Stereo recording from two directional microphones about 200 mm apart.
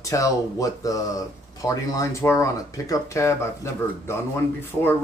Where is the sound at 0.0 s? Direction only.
15° left (ahead or behind).